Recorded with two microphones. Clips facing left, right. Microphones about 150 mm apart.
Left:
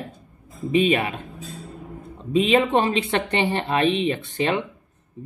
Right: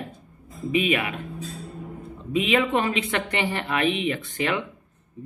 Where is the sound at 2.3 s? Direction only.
30° left (ahead or behind).